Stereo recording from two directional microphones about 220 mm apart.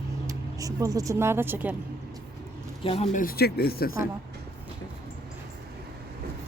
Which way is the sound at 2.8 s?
25° left (ahead or behind).